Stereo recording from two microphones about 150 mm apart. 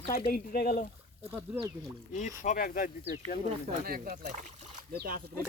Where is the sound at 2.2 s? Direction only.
60° left (ahead or behind).